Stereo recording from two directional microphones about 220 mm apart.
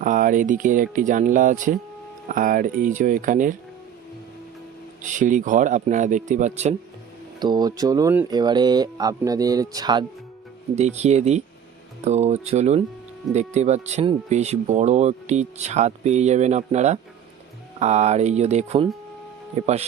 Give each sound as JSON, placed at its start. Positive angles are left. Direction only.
{"t": 0.0, "sound": "speech", "side_deg": -35}
{"t": 5.0, "sound": "speech", "side_deg": -35}
{"t": 7.3, "sound": "speech", "side_deg": -20}
{"t": 10.8, "sound": "speech", "side_deg": -30}